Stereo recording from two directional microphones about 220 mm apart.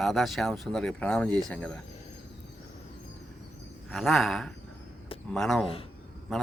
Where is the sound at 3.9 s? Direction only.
Centre (ahead or behind).